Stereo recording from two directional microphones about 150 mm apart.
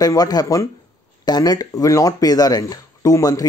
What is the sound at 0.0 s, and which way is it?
Speech, 25° left (ahead or behind).